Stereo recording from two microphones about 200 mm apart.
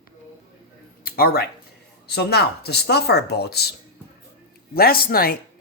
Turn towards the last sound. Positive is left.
turn(degrees=50)  # may be behind; listen again after turning